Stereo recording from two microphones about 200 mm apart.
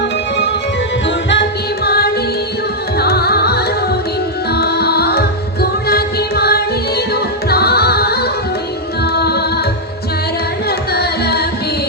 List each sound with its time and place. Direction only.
1.3 s music: 55° left (ahead or behind)
10.7 s carnatic music: 50° left (ahead or behind)